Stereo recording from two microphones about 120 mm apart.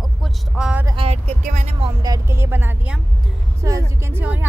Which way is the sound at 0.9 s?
55° right (ahead or behind).